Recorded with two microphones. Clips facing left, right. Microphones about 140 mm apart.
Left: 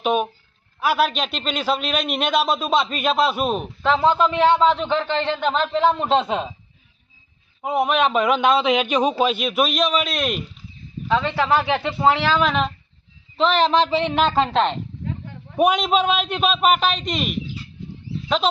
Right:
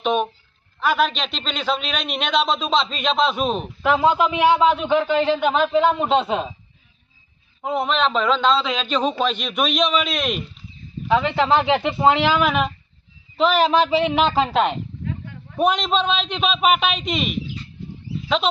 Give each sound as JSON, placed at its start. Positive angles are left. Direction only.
{"t": 0.0, "sound": "a sound", "side_deg": 5}
{"t": 0.8, "sound": "a man's voice", "side_deg": 5}
{"t": 3.8, "sound": "a man's voice", "side_deg": -10}
{"t": 7.6, "sound": "a man's voice", "side_deg": 10}
{"t": 11.1, "sound": "a man's voice", "side_deg": -15}
{"t": 15.5, "sound": "a man's voice", "side_deg": 10}